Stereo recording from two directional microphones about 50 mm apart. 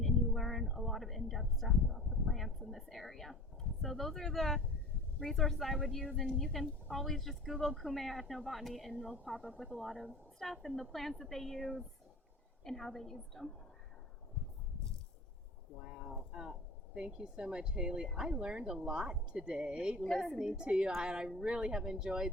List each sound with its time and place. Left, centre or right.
0.0 s a sound: centre
0.8 s speech: centre
15.8 s speech: centre
20.1 s speech: centre
20.4 s speech: centre